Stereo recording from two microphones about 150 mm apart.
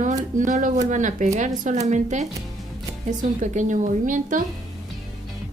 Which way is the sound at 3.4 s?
55° right (ahead or behind).